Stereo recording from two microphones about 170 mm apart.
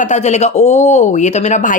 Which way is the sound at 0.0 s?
45° left (ahead or behind).